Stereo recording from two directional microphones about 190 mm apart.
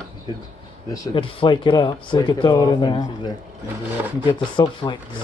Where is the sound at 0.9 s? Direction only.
20° left (ahead or behind).